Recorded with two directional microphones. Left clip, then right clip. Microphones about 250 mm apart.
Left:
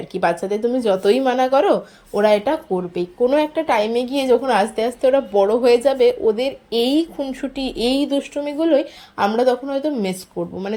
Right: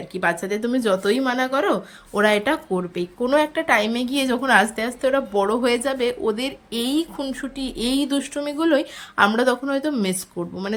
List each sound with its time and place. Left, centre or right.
0.1 s speech: centre